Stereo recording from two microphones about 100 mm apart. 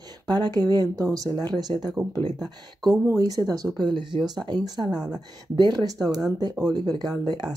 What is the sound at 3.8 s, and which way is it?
Speech, 50° right (ahead or behind).